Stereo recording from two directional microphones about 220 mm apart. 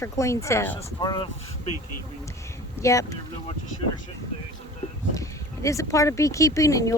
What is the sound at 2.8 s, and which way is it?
Speech, 15° left (ahead or behind).